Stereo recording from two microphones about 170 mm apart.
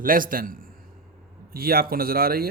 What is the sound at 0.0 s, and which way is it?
Speech, 55° right (ahead or behind).